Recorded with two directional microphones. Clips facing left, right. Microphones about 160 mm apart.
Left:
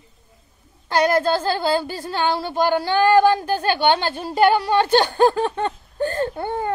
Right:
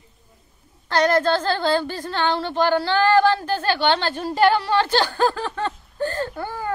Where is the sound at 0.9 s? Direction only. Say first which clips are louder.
Even; 10° left (ahead or behind).